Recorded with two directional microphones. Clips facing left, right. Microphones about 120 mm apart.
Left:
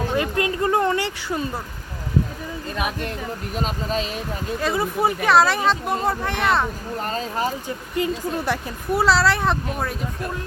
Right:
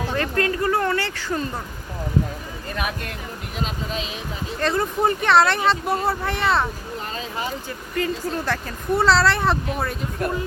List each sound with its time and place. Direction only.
0.2 s speech: 15° left (ahead or behind)
3.5 s speech: 40° left (ahead or behind)
4.6 s speech: 5° left (ahead or behind)
7.0 s speech: 45° left (ahead or behind)
7.9 s speech: 20° left (ahead or behind)
9.0 s speech: centre (ahead or behind)